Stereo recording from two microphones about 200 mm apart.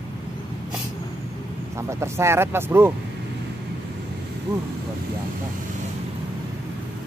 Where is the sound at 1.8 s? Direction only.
15° right (ahead or behind).